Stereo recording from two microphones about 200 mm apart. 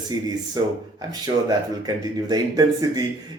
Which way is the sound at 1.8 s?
20° right (ahead or behind).